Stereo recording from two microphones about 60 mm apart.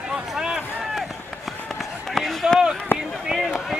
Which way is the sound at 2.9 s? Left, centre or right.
Left.